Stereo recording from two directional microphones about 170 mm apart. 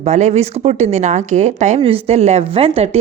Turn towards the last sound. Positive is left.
turn(degrees=-35)  # may be behind; listen again after turning